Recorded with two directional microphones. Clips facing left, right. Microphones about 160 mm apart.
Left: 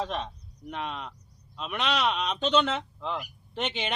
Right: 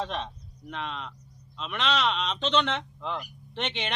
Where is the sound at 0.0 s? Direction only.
5° left (ahead or behind).